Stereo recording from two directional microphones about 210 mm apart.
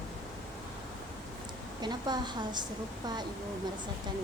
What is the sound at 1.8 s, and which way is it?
Speech, 20° right (ahead or behind).